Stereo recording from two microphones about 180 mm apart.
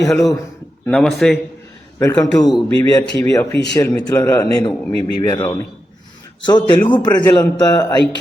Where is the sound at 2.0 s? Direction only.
20° left (ahead or behind).